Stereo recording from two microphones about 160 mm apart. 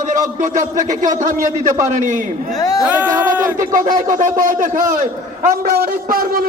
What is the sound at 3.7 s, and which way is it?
Speech, 55° right (ahead or behind).